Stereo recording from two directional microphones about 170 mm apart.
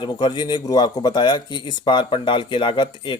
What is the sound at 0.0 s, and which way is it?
Speech, 25° left (ahead or behind).